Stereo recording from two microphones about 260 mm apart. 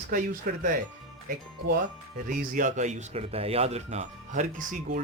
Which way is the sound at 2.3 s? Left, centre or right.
Right.